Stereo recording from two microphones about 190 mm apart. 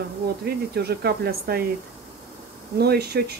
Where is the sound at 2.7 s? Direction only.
55° right (ahead or behind).